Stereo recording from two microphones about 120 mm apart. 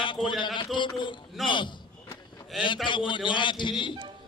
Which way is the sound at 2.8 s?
40° left (ahead or behind).